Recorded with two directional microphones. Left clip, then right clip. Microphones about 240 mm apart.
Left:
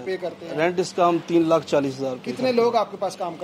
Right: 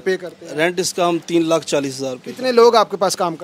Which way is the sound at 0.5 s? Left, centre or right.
Right.